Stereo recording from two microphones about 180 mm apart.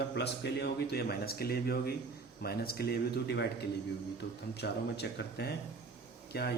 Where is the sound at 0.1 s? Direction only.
65° left (ahead or behind).